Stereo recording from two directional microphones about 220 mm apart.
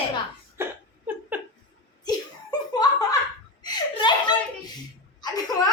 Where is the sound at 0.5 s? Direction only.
10° right (ahead or behind).